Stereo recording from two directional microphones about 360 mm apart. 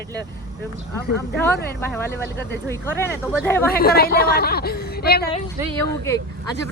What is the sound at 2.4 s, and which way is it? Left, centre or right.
Speech, left.